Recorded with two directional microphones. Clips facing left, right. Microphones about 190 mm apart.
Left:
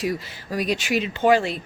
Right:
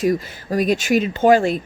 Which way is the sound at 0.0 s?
45° right (ahead or behind).